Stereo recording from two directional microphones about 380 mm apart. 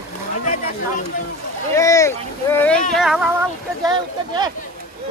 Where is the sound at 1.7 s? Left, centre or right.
Centre.